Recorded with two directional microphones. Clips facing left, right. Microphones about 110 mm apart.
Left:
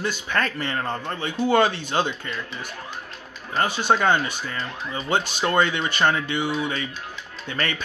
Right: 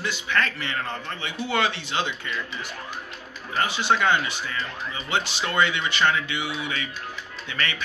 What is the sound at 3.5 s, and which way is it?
Speech, 45° left (ahead or behind).